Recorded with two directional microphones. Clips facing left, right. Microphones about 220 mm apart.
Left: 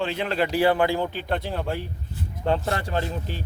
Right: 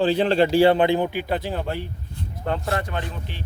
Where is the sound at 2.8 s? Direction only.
30° left (ahead or behind).